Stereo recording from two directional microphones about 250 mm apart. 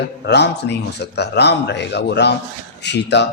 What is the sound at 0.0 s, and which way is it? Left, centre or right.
A man's voice, left.